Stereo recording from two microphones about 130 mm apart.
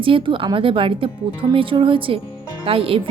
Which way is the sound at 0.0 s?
40° right (ahead or behind).